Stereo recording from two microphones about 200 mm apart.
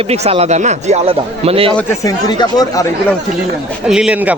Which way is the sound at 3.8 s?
5° right (ahead or behind).